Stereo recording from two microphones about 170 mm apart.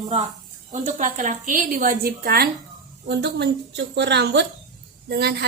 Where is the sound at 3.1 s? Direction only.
85° right.